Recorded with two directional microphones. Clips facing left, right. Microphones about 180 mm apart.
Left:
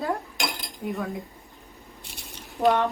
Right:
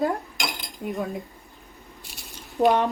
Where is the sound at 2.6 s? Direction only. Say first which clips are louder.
Right 2 dB; 20° right (ahead or behind).